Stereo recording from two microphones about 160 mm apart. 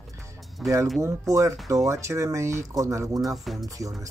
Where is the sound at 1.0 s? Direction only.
20° right (ahead or behind).